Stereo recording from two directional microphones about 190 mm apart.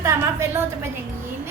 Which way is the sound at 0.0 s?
15° right (ahead or behind).